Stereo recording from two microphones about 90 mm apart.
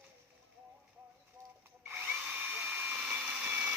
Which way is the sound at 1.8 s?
20° right (ahead or behind).